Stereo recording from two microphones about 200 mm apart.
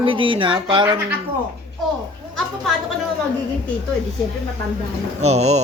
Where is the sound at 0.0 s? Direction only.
25° right (ahead or behind).